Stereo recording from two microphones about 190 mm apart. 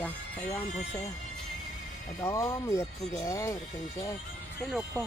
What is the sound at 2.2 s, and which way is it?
Speech, 15° left (ahead or behind).